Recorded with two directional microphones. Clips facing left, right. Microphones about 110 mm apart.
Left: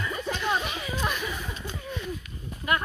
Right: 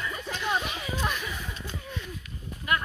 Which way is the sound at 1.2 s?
25° left (ahead or behind).